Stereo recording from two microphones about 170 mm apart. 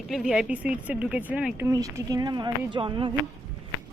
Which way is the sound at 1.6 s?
20° right (ahead or behind).